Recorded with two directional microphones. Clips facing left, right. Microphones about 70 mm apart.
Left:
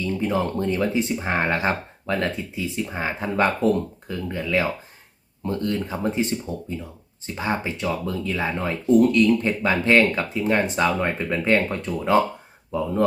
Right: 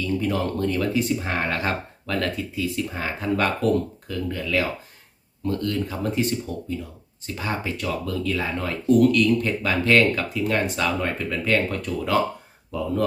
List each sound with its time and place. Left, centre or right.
0.0 s speech: left